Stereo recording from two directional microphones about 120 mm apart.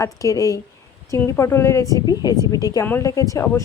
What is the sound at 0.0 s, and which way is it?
A woman's voice, 30° left (ahead or behind).